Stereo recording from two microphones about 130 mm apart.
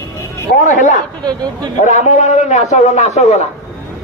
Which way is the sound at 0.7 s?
70° left (ahead or behind).